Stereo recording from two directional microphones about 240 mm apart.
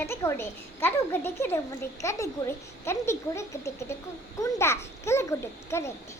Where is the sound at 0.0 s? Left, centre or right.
Centre.